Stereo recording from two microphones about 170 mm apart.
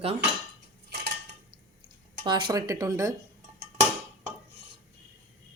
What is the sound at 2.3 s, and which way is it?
Speech, 25° right (ahead or behind).